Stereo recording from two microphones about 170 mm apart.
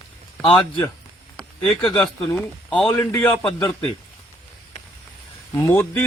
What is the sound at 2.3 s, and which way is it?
Speech, 5° left (ahead or behind).